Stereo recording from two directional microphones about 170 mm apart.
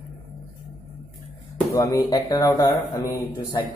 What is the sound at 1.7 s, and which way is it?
Speech, 20° left (ahead or behind).